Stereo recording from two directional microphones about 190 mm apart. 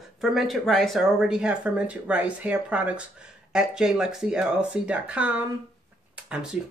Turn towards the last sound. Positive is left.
turn(degrees=-5)  # may be behind; listen again after turning